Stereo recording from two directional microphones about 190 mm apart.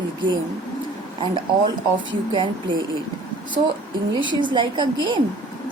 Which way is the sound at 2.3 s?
25° right (ahead or behind).